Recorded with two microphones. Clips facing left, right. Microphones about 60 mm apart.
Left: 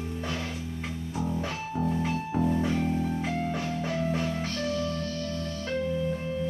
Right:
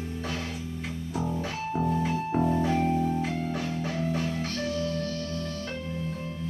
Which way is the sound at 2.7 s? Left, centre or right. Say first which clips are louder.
Right 2 dB; right.